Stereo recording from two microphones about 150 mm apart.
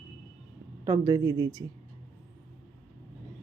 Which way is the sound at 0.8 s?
20° right (ahead or behind).